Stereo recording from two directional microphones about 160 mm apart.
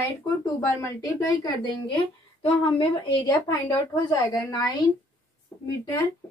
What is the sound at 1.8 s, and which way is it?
A woman's voice, 30° left (ahead or behind).